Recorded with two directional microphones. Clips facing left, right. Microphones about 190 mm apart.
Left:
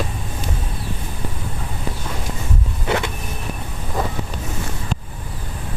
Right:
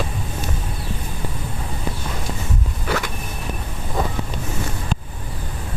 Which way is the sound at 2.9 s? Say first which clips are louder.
Left 3 dB; 25° left (ahead or behind).